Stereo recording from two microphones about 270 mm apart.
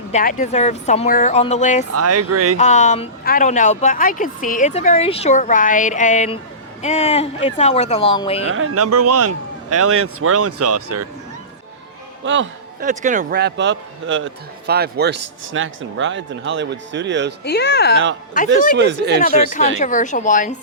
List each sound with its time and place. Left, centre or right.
0.1 s speech: left
1.9 s a man's voice: right
2.6 s speech: left
8.4 s a man's voice: right
12.2 s speech: right
12.8 s a man's voice: right
17.4 s speech: left
18.8 s a man's voice: right
19.5 s speech: left